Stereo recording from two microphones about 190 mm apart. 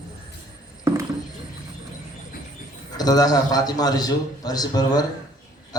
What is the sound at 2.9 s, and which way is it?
A man's voice, 20° left (ahead or behind).